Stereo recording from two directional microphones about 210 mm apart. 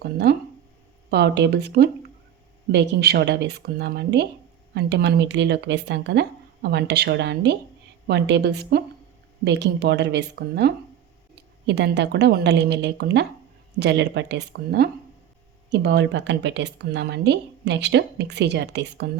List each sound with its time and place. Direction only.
0.0 s speech: 50° right (ahead or behind)